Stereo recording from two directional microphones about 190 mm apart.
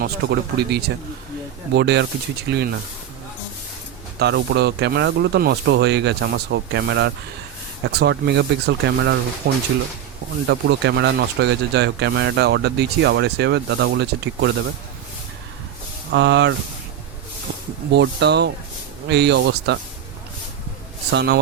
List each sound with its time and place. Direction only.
0.0 s speech: 55° right (ahead or behind)
4.2 s speech: 60° right (ahead or behind)
16.1 s speech: 65° right (ahead or behind)
17.9 s speech: 65° right (ahead or behind)
21.1 s speech: 65° right (ahead or behind)